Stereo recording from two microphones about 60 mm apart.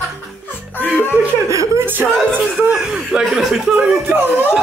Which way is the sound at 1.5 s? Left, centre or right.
Right.